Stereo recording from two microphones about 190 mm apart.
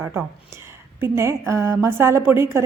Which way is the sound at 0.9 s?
15° right (ahead or behind).